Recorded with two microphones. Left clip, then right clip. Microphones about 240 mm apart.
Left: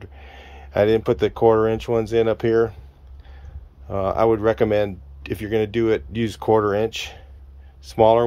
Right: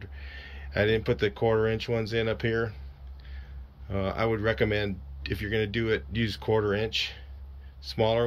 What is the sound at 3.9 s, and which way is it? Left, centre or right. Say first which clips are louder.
Speech: left 10 dB; centre.